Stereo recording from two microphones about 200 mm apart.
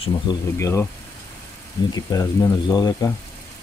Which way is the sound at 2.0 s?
15° left (ahead or behind).